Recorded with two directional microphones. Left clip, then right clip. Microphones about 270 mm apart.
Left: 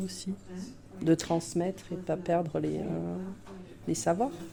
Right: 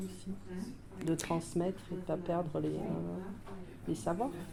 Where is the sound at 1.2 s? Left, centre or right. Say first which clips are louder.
Left 5 dB; left.